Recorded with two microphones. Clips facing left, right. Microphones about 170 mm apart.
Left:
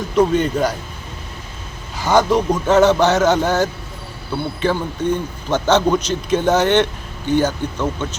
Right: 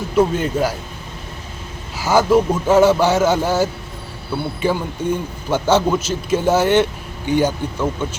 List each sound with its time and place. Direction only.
0.2 s a man's voice: 5° right (ahead or behind)
2.0 s a man's voice: 5° right (ahead or behind)